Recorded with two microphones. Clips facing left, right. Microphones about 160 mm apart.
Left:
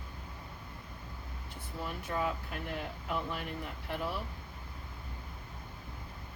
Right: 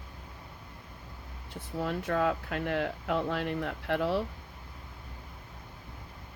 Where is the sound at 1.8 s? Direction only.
90° right.